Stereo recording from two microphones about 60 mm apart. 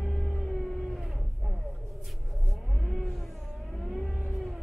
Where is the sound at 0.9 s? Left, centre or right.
Centre.